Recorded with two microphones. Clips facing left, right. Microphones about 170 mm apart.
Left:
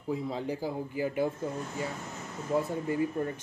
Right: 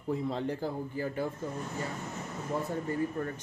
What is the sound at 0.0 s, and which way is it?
Speech, 5° left (ahead or behind).